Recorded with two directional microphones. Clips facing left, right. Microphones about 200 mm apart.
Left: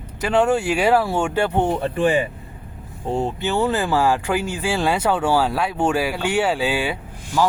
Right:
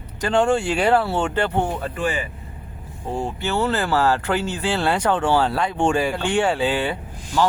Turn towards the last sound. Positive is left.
turn(degrees=10)  # may be behind; listen again after turning